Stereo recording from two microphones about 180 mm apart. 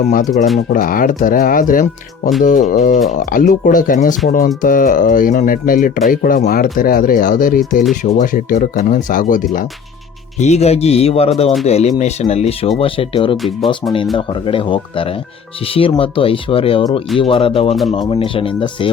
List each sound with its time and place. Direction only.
0.1 s speech: 45° left (ahead or behind)
10.3 s speech: 40° left (ahead or behind)
13.3 s speech: centre (ahead or behind)
14.2 s speech: 30° left (ahead or behind)